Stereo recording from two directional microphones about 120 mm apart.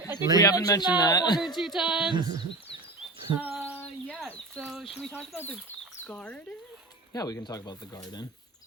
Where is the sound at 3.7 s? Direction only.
15° left (ahead or behind).